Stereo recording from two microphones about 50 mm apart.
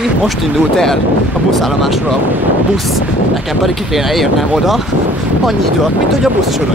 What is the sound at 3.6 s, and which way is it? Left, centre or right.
Speech, centre.